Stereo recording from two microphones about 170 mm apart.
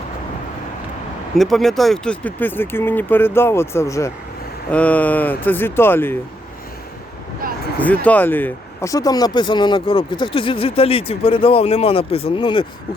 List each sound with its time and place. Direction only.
1.4 s speech: centre (ahead or behind)
8.0 s speech: 10° left (ahead or behind); by 12.6 s 30° left (ahead or behind)